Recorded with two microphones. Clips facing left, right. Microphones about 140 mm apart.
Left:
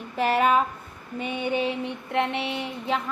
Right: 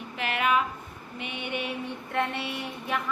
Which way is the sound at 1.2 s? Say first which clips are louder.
Left 8 dB; 40° left (ahead or behind).